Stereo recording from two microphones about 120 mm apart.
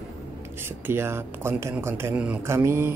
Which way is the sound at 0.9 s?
20° right (ahead or behind).